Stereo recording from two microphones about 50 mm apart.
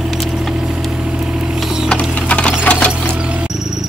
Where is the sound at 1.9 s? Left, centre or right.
Left.